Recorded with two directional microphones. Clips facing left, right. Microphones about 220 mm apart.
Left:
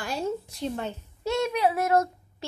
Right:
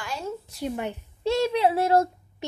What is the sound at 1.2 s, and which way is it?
Speech, 30° right (ahead or behind).